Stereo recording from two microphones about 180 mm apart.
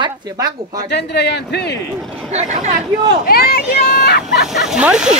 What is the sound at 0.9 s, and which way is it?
Speech, 70° left (ahead or behind).